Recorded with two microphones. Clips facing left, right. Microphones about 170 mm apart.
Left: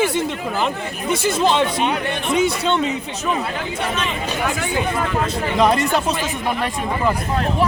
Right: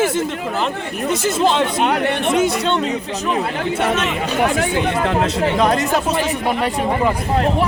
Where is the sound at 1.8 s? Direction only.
70° right (ahead or behind).